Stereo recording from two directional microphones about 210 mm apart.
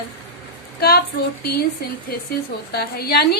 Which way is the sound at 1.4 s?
45° left (ahead or behind).